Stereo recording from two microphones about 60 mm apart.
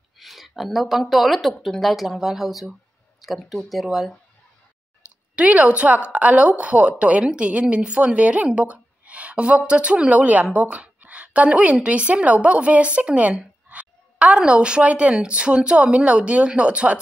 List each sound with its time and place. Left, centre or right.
0.2 s speech: centre
5.3 s a woman's voice: right